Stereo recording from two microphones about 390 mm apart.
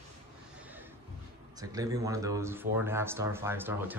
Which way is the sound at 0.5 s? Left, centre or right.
Centre.